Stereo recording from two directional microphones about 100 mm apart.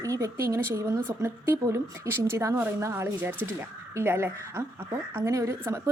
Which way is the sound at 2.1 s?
25° right (ahead or behind).